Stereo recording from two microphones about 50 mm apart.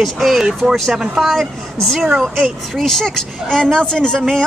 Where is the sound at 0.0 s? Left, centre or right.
Centre.